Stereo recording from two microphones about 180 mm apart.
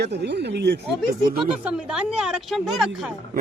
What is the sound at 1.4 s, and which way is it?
Speech, 5° right (ahead or behind).